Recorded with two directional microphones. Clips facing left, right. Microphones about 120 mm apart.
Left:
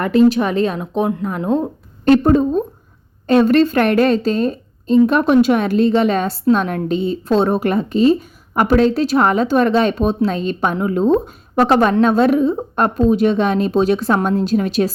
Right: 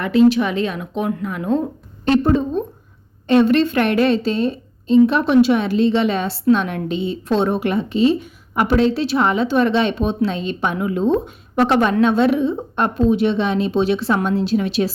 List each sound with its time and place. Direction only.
0.0 s a woman's voice: 45° left (ahead or behind)
2.0 s a woman's voice: 45° left (ahead or behind)